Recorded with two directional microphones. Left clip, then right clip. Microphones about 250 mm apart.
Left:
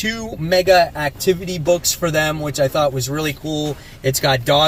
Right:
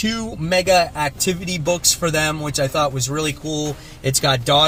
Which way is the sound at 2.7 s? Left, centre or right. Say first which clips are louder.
Left 2 dB; centre.